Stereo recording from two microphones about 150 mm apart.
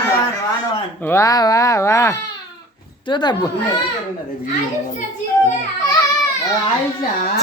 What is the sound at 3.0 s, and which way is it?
Speech, 30° left (ahead or behind).